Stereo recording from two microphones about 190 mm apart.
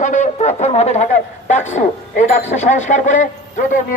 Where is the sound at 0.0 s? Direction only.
40° left (ahead or behind).